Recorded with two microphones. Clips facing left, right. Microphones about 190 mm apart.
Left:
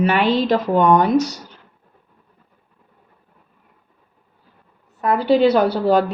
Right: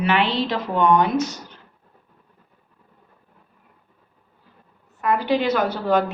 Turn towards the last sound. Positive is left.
turn(degrees=35)  # may be behind; listen again after turning